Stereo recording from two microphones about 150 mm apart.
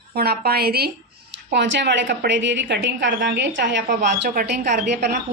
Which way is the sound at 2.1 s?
90° right.